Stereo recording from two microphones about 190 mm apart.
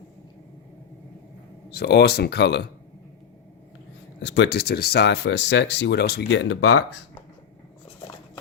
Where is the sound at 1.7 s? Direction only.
60° left (ahead or behind).